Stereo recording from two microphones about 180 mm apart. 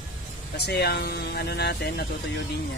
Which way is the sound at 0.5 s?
65° left (ahead or behind).